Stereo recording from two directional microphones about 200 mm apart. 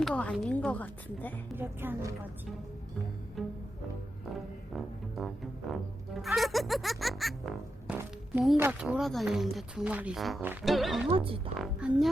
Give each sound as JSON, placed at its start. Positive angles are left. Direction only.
{"t": 0.0, "sound": "a woman's voice", "side_deg": 5}
{"t": 1.5, "sound": "speech", "side_deg": -10}
{"t": 3.4, "sound": "music", "side_deg": 0}
{"t": 4.7, "sound": "speech", "side_deg": 0}
{"t": 11.1, "sound": "speech", "side_deg": -25}
{"t": 11.5, "sound": "speech", "side_deg": 0}